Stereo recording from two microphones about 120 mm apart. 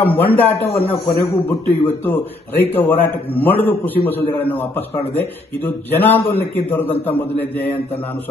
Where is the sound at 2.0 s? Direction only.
15° left (ahead or behind).